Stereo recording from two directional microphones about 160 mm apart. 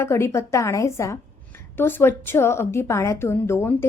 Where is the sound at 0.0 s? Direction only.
15° left (ahead or behind).